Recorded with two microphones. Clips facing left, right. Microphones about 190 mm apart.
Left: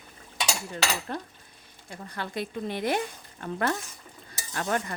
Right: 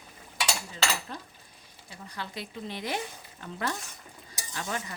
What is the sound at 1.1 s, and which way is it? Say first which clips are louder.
Speech: left 7 dB; 55° left (ahead or behind).